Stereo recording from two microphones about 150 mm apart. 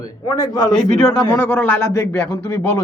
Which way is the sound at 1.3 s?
15° left (ahead or behind).